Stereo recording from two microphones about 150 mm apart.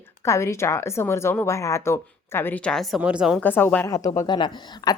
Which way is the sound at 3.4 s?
10° left (ahead or behind).